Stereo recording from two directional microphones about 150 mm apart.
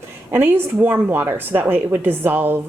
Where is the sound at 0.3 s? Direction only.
15° right (ahead or behind).